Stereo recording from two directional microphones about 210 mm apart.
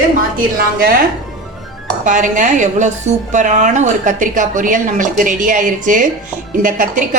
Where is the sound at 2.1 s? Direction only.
35° right (ahead or behind).